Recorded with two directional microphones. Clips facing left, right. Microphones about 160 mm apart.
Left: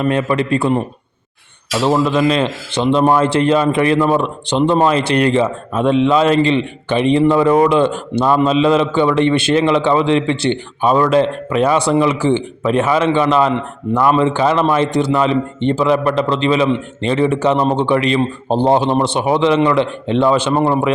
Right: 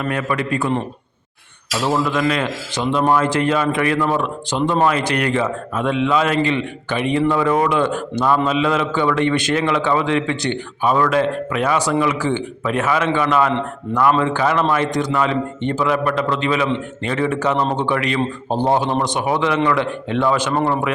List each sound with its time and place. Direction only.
0.0 s a man's voice: 25° left (ahead or behind)
1.8 s a man's voice: 25° left (ahead or behind)